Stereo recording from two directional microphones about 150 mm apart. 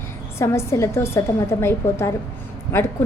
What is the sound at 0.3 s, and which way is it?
A woman's voice, 15° left (ahead or behind).